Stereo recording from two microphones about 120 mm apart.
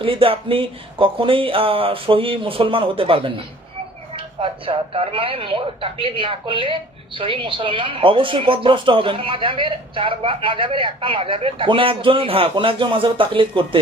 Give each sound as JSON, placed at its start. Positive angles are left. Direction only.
{"t": 0.0, "sound": "speech", "side_deg": -50}